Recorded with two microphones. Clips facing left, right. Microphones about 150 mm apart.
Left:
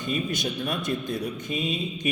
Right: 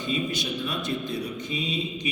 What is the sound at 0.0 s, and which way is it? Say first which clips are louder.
Speech: even; 50° left (ahead or behind).